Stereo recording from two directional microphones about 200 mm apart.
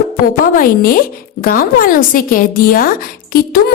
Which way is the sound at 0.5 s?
45° left (ahead or behind).